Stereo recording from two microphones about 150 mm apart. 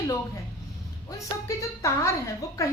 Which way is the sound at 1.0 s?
20° left (ahead or behind).